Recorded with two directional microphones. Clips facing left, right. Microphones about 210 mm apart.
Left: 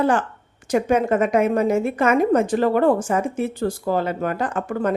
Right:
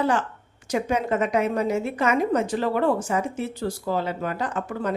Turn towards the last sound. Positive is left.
turn(degrees=55)  # may be behind; listen again after turning